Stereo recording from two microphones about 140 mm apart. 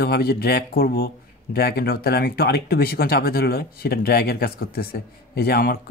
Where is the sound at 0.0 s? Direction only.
90° left.